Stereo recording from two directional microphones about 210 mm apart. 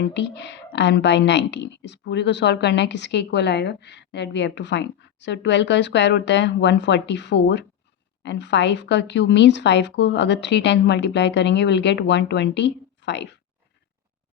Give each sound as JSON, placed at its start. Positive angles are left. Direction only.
{"t": 0.0, "sound": "a woman's voice", "side_deg": 55}